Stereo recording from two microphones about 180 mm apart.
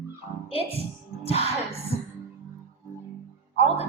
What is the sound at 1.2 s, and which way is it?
Speech, 35° left (ahead or behind).